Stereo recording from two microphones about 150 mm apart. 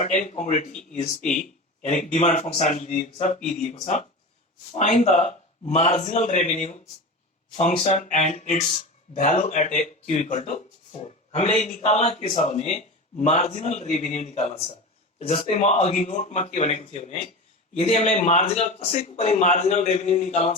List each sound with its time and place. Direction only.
0.0 s a man's voice: 55° left (ahead or behind)